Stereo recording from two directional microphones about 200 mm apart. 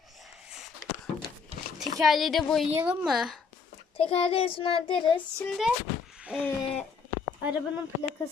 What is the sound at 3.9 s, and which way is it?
A child's voice, 30° left (ahead or behind).